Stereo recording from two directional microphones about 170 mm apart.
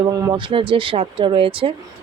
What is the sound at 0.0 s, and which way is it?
Speech, 25° right (ahead or behind).